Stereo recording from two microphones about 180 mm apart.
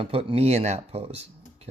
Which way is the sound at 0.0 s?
30° right (ahead or behind).